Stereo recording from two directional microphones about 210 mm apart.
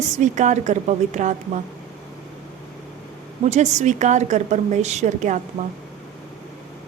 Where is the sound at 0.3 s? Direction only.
35° right (ahead or behind).